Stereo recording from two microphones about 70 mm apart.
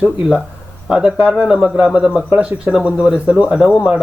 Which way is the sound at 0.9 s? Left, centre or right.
Centre.